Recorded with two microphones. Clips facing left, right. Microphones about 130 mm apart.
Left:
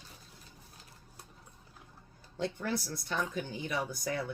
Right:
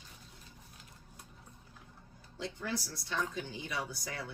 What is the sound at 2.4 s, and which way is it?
Speech, 55° left (ahead or behind).